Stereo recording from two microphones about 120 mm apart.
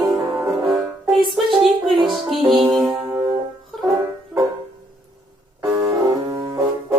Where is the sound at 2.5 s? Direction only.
35° right (ahead or behind).